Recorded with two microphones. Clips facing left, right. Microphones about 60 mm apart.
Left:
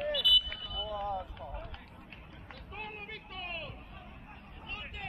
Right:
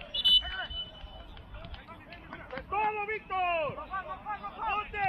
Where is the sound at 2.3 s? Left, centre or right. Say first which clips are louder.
Right 15 dB; right.